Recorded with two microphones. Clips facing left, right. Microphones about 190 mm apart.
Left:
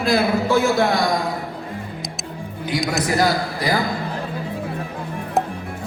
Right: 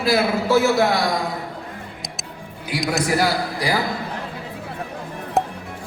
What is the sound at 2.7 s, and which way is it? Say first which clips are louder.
A man's voice: even; 5° right (ahead or behind).